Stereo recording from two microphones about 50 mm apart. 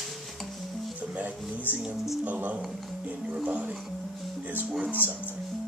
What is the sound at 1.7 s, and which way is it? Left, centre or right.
Music, right.